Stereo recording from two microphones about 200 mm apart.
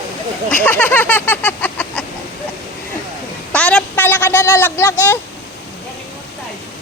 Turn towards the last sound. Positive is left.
turn(degrees=10)  # may be behind; listen again after turning